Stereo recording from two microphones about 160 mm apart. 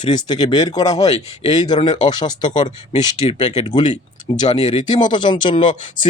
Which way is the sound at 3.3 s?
45° left (ahead or behind).